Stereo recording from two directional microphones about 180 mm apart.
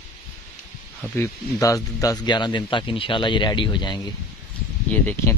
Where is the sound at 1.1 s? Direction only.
15° left (ahead or behind).